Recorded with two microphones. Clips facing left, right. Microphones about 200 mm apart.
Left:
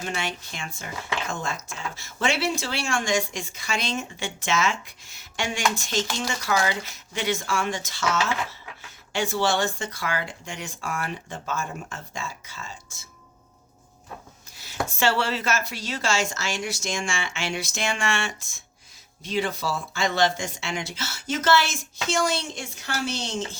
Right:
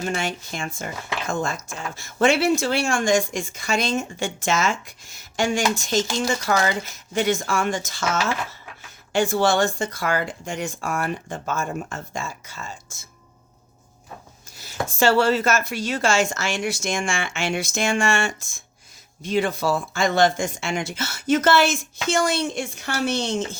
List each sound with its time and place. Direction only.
0.0 s speech: 45° right (ahead or behind)
2.1 s speech: 50° right (ahead or behind)
14.6 s speech: 45° right (ahead or behind)